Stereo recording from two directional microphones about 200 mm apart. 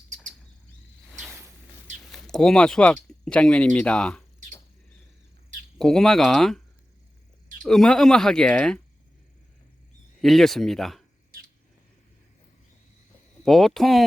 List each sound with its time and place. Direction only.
1.2 s a sound: 10° right (ahead or behind)
2.0 s speech: centre (ahead or behind)
5.7 s speech: centre (ahead or behind)
7.6 s speech: centre (ahead or behind)
10.2 s speech: centre (ahead or behind)
13.4 s speech: centre (ahead or behind)